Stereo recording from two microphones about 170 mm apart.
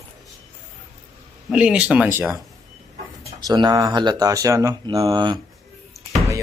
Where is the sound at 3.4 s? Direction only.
25° right (ahead or behind).